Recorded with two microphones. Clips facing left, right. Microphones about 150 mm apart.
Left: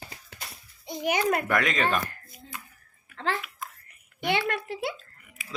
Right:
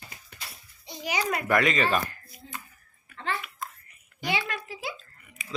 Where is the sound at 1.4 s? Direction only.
Centre (ahead or behind).